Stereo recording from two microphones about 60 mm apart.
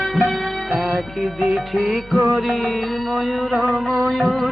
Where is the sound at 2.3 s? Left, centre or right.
Centre.